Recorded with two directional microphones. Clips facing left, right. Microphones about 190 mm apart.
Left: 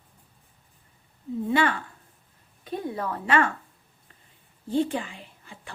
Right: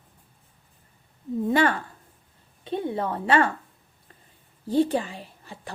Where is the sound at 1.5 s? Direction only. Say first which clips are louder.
Right 2 dB; 40° right (ahead or behind).